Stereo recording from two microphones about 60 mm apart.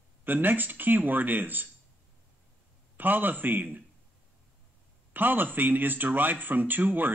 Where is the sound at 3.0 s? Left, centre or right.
Right.